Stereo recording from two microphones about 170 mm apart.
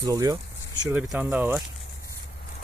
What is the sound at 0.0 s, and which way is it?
Speech, 20° right (ahead or behind).